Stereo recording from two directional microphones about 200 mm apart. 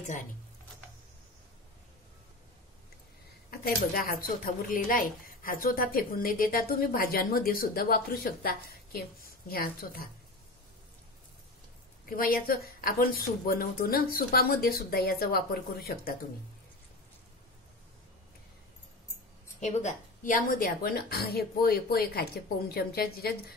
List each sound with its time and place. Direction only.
3.4 s speech: 45° left (ahead or behind)
12.1 s speech: 45° left (ahead or behind)
19.6 s speech: 35° left (ahead or behind)